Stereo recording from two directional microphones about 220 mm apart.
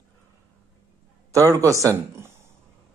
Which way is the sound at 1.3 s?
15° right (ahead or behind).